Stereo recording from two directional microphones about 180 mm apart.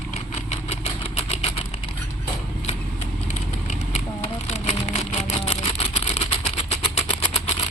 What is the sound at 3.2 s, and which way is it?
Vehicle, 40° left (ahead or behind).